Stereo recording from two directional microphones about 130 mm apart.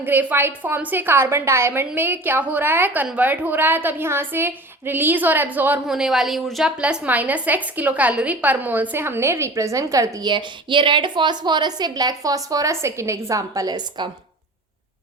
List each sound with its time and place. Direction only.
0.0 s a woman's voice: 15° right (ahead or behind)
5.9 s a woman's voice: centre (ahead or behind); by 14.1 s 30° right (ahead or behind)